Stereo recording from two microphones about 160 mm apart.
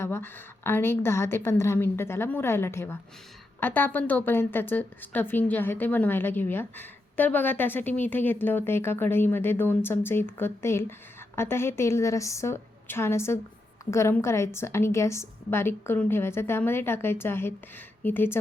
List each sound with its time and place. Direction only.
0.0 s a woman's voice: 15° left (ahead or behind)